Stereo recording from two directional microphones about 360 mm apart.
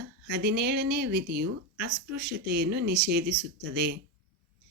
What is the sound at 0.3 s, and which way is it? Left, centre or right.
Speech, right.